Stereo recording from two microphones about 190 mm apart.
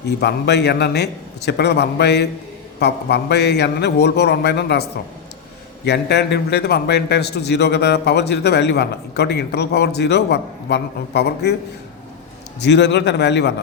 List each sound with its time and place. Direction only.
0.2 s a man's voice: 60° left (ahead or behind)
12.6 s a man's voice: 65° left (ahead or behind)